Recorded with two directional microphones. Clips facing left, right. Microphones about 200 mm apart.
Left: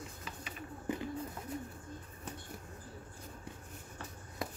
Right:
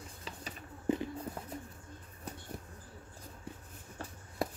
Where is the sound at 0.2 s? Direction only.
35° right (ahead or behind).